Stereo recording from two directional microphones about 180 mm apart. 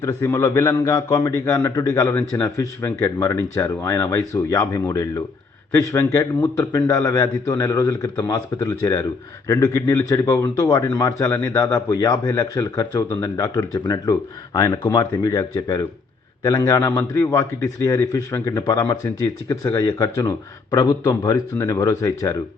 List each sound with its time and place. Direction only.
0.0 s a man's voice: 10° left (ahead or behind)